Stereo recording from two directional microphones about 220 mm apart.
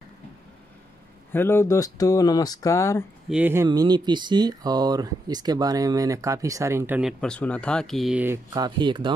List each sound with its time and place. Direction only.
1.3 s speech: 10° left (ahead or behind)
3.3 s speech: 5° right (ahead or behind)
3.6 s speech: 20° right (ahead or behind)
8.5 s speech: 20° right (ahead or behind)